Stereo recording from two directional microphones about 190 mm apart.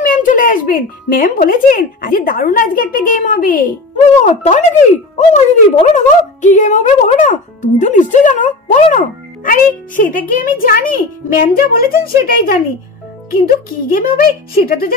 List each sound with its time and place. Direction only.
0.0 s a woman's voice: 45° left (ahead or behind)